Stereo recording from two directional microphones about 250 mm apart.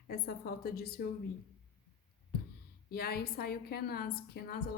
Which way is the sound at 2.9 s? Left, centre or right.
Left.